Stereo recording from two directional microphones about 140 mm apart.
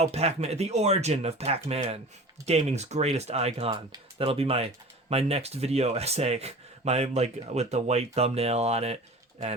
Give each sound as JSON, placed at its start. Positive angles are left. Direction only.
{"t": 0.0, "sound": "speech", "side_deg": -50}